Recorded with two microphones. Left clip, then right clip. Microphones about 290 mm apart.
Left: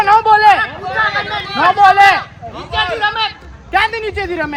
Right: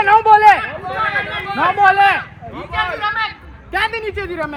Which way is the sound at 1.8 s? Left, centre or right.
Centre.